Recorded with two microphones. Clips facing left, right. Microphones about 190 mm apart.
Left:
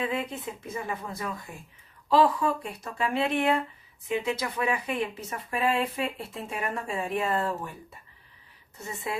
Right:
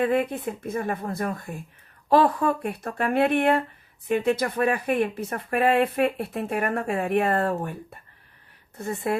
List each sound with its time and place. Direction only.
0.0 s speech: 55° right (ahead or behind)